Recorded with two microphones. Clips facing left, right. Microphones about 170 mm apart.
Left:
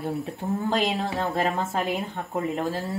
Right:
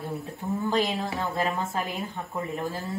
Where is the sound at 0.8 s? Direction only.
20° left (ahead or behind).